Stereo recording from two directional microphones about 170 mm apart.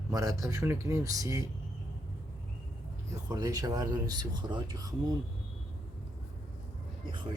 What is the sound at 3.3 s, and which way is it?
Speech, 20° right (ahead or behind).